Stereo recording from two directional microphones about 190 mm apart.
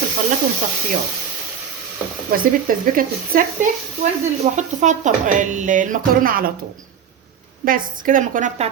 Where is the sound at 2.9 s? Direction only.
45° right (ahead or behind).